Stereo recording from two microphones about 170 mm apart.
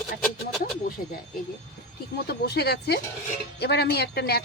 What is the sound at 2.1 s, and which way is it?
Speech, 70° left (ahead or behind).